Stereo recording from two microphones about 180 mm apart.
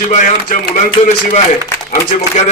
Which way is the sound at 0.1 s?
45° left (ahead or behind).